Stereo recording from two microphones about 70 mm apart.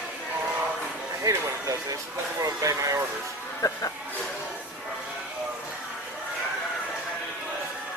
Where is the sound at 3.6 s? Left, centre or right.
Left.